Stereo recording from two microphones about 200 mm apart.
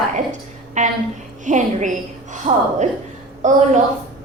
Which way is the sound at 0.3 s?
35° right (ahead or behind).